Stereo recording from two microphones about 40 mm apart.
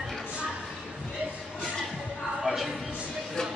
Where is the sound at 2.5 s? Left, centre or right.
Centre.